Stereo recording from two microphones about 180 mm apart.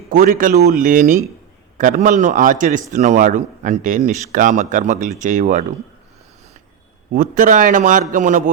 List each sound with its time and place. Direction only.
0.1 s speech: 50° right (ahead or behind)
7.1 s speech: 45° right (ahead or behind)